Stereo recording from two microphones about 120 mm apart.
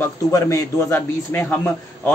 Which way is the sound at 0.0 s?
25° left (ahead or behind).